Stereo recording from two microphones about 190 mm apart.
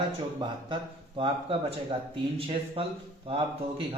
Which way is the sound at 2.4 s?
30° right (ahead or behind).